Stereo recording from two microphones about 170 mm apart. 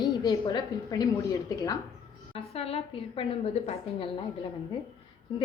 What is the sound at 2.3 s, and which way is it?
A woman's voice, 35° left (ahead or behind).